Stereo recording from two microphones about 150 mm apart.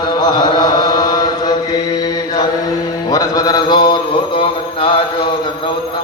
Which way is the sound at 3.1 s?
25° left (ahead or behind).